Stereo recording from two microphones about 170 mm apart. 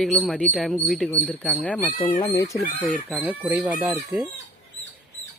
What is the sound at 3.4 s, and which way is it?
Speech, 15° right (ahead or behind).